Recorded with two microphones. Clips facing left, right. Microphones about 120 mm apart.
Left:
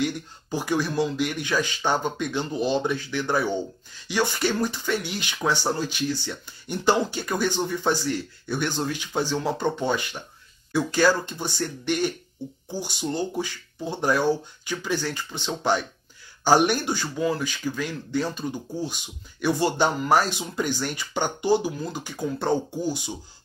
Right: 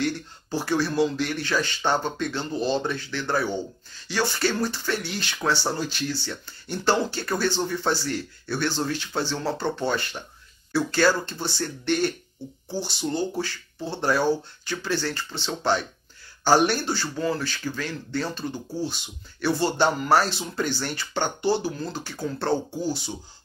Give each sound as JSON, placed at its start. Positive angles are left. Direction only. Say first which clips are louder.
{"t": 0.0, "sound": "speech", "louder": "even", "side_deg": 15}